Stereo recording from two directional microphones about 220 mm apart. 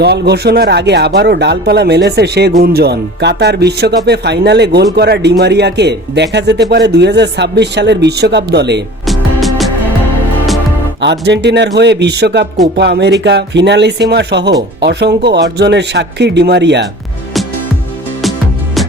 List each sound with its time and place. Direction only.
0.0 s speech: 45° right (ahead or behind)
9.0 s music: centre (ahead or behind)
11.0 s speech: 50° right (ahead or behind)
18.2 s music: centre (ahead or behind)